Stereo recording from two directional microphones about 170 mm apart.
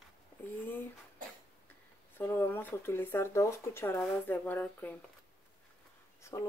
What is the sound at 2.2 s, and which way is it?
Speech, 10° left (ahead or behind).